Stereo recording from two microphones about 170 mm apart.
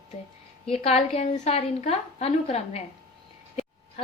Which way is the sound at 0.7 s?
35° left (ahead or behind).